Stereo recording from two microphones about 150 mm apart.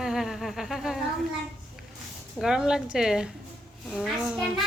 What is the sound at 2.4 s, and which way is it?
A woman's voice, 5° right (ahead or behind).